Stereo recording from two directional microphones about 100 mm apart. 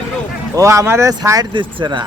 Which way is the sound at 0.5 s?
30° right (ahead or behind).